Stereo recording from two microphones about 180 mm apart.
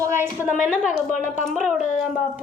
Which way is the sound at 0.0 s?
15° right (ahead or behind).